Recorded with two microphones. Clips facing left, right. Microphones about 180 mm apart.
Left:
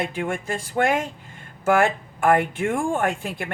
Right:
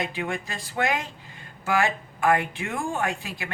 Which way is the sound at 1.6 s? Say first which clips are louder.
Left 5 dB; 50° left (ahead or behind).